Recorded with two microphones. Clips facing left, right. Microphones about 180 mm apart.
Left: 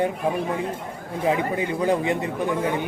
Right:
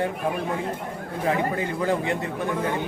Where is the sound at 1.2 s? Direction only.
20° left (ahead or behind).